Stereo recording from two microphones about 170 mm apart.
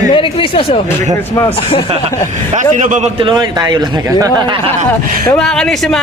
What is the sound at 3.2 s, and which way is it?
A man's voice, 25° right (ahead or behind).